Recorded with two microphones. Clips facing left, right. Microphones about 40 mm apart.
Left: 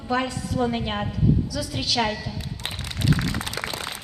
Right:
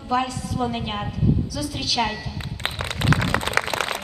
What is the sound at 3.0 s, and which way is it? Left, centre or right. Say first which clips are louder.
Applause: right 2 dB; right.